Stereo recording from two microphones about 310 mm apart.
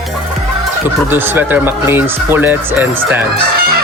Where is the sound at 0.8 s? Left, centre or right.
Centre.